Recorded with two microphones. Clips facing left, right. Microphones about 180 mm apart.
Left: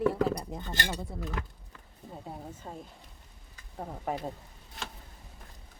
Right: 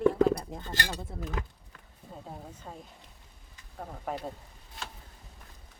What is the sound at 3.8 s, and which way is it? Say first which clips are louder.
Speech: left 2 dB; 5° left (ahead or behind).